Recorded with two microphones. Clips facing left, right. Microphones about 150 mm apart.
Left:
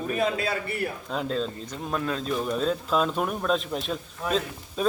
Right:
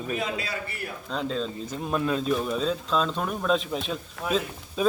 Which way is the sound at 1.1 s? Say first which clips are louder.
Right 2 dB; 5° left (ahead or behind).